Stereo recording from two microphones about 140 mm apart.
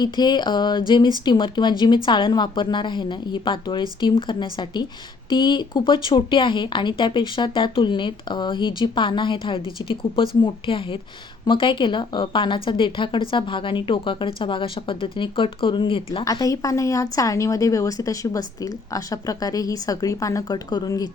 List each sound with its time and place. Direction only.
0.0 s speech: 30° left (ahead or behind)
16.2 s a woman's voice: 25° left (ahead or behind)